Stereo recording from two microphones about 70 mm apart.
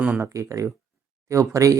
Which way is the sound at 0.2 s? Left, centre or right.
Right.